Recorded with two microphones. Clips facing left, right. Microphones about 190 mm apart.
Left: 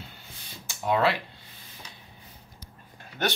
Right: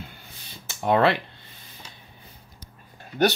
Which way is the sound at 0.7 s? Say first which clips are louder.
Right 4 dB; 55° right (ahead or behind).